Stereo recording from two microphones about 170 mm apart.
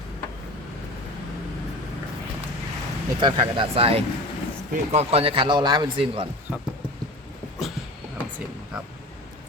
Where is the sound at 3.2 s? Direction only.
30° right (ahead or behind).